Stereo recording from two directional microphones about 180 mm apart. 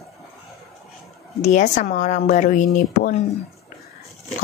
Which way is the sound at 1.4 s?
40° left (ahead or behind).